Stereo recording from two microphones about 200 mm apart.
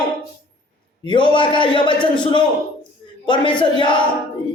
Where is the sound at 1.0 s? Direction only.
25° left (ahead or behind).